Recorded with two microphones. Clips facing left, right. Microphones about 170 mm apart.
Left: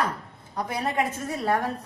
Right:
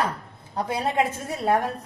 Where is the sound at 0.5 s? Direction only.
30° right (ahead or behind).